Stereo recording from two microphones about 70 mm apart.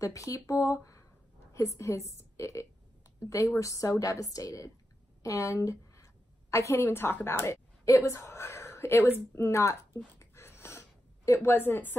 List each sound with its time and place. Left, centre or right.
0.0 s speech: left
6.8 s speech: left
7.8 s a woman's voice: left
10.1 s a sound: left
11.2 s a woman's voice: left
11.5 s speech: left